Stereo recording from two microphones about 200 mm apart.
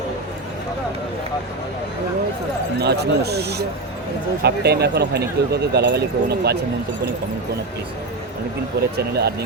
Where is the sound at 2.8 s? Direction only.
55° right (ahead or behind).